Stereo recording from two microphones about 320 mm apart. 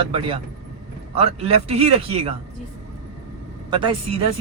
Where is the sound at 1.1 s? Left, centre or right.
Centre.